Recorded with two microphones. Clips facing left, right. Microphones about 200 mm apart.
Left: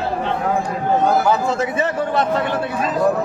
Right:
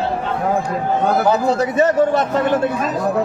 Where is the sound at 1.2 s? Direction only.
40° right (ahead or behind).